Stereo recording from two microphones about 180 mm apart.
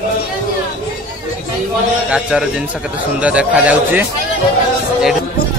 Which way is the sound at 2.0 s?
5° right (ahead or behind).